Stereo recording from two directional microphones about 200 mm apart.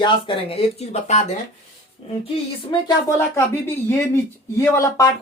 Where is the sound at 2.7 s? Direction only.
20° left (ahead or behind).